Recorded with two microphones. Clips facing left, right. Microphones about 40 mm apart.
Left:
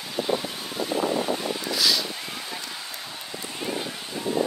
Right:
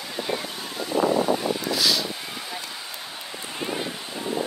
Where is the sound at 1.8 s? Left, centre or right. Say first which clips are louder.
Left 1 dB; centre.